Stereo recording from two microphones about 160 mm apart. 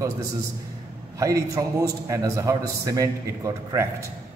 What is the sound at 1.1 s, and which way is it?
A man's voice, 20° right (ahead or behind).